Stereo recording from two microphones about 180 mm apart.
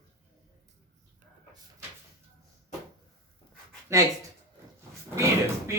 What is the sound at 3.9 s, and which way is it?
Speech, 15° right (ahead or behind).